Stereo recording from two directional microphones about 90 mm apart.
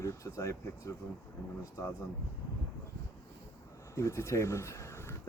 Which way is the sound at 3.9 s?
35° left (ahead or behind).